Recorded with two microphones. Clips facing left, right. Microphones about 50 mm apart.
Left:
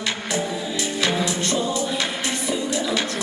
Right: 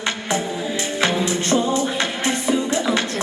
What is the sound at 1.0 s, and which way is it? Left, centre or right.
Music, right.